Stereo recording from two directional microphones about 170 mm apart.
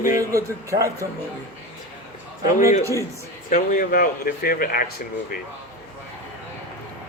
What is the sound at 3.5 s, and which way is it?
Speech, 50° left (ahead or behind).